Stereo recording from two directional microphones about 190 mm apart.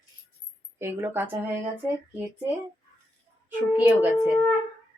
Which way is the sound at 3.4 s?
10° right (ahead or behind).